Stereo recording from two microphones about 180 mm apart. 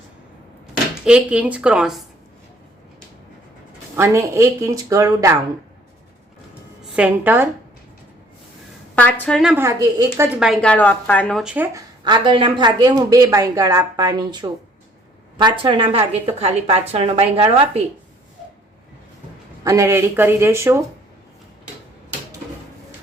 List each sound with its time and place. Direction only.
1.0 s speech: 5° right (ahead or behind)
3.9 s speech: 15° right (ahead or behind)
6.9 s speech: 10° right (ahead or behind)
9.0 s a woman's voice: 10° left (ahead or behind)
9.4 s speech: 10° right (ahead or behind)
10.4 s speech: 5° left (ahead or behind)
12.0 s a woman's voice: 25° right (ahead or behind)
19.6 s speech: 15° right (ahead or behind)